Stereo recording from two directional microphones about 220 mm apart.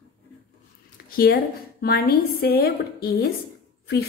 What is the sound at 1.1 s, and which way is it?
A woman's voice, 45° left (ahead or behind).